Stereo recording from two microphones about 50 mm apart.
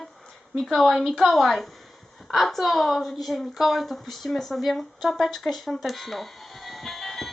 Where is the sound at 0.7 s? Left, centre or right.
Centre.